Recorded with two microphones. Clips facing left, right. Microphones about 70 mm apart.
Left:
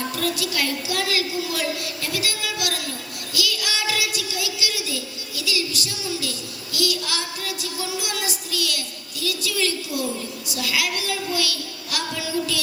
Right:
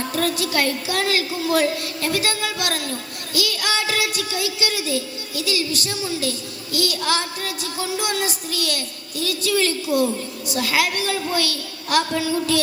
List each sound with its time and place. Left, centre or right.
0.2 s a woman's voice: right